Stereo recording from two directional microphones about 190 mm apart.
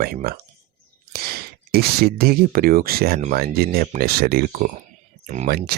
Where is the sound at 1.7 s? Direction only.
55° right (ahead or behind).